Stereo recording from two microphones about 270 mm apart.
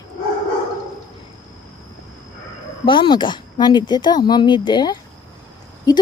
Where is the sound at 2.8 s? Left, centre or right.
Centre.